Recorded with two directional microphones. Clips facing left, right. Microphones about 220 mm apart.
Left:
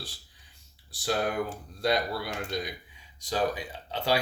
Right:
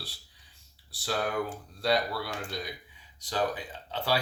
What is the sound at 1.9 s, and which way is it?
Speech, 15° left (ahead or behind).